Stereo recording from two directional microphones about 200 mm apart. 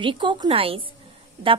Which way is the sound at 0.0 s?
25° right (ahead or behind).